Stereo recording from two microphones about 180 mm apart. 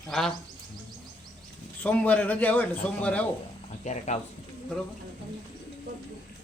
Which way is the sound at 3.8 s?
40° left (ahead or behind).